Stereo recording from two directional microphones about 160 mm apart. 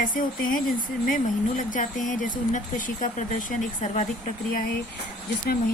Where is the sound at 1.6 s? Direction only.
55° left (ahead or behind).